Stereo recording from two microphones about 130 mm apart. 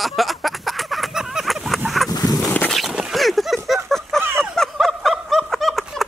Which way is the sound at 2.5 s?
10° left (ahead or behind).